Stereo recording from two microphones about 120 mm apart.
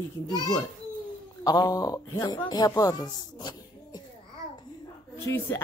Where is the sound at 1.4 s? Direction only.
30° left (ahead or behind).